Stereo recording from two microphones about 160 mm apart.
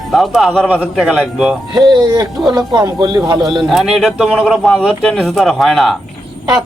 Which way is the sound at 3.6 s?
Centre (ahead or behind).